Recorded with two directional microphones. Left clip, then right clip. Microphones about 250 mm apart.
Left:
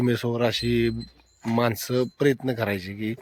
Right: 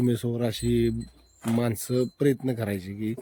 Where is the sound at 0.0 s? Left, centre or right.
Centre.